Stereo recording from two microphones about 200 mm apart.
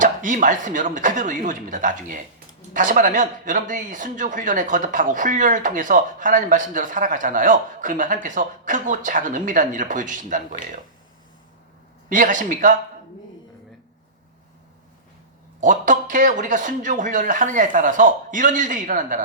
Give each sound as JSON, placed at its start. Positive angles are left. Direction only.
{"t": 0.0, "sound": "speech", "side_deg": -40}
{"t": 12.0, "sound": "speech", "side_deg": -40}
{"t": 15.6, "sound": "speech", "side_deg": -40}